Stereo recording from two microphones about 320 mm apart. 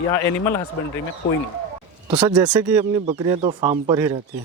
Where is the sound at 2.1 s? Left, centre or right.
Centre.